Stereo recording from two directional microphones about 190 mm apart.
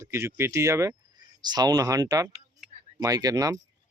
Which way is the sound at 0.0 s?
15° right (ahead or behind).